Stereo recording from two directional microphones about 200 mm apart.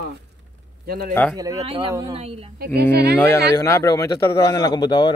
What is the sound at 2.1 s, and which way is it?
Speech, 30° right (ahead or behind).